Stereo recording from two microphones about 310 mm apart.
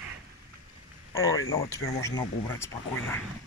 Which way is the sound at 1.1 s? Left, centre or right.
Centre.